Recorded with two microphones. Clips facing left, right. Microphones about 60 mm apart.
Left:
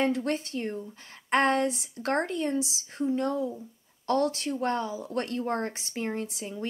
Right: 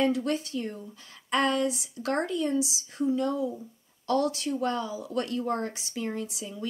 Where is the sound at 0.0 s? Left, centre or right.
Left.